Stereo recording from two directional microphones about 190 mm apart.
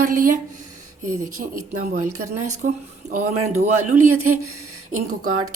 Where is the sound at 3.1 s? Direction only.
35° right (ahead or behind).